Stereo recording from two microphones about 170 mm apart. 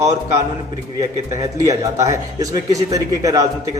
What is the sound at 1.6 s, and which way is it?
A man's voice, 20° right (ahead or behind).